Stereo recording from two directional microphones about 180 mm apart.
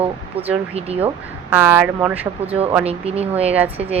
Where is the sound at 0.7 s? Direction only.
35° right (ahead or behind).